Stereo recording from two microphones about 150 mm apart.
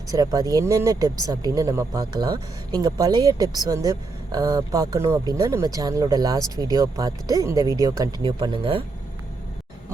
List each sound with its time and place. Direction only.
0.1 s speech: 25° right (ahead or behind)